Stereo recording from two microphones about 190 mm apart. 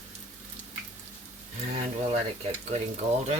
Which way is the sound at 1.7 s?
35° right (ahead or behind).